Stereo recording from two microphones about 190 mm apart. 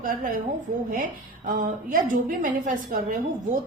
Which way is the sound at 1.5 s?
45° right (ahead or behind).